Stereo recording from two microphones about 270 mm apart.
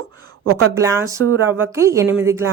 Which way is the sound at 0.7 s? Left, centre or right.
Centre.